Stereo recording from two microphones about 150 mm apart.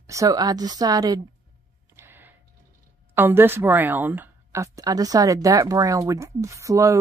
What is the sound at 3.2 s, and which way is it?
A woman's voice, 15° right (ahead or behind).